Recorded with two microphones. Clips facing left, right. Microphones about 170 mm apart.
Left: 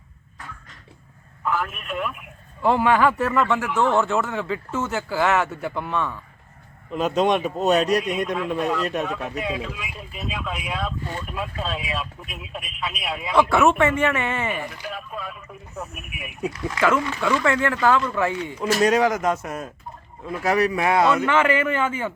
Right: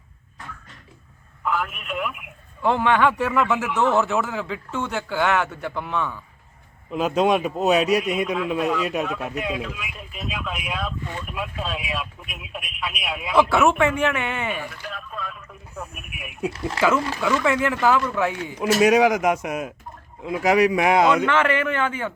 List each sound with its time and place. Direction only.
1.5 s a man's voice: centre (ahead or behind)
2.6 s a man's voice: 5° left (ahead or behind)
14.7 s a man's voice: 10° left (ahead or behind)
16.5 s speech: 30° right (ahead or behind)
17.2 s speech: 5° right (ahead or behind)
21.2 s a man's voice: 5° left (ahead or behind)